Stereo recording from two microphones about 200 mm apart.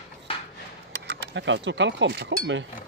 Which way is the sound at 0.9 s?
60° right (ahead or behind).